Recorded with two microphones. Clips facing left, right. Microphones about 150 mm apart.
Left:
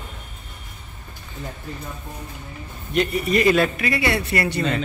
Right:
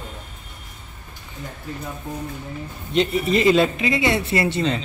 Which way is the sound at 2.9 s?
25° right (ahead or behind).